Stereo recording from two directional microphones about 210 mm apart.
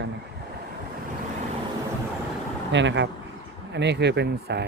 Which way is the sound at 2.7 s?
60° right (ahead or behind).